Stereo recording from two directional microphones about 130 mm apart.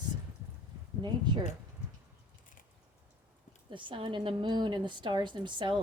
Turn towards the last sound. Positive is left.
turn(degrees=-35)  # may be behind; listen again after turning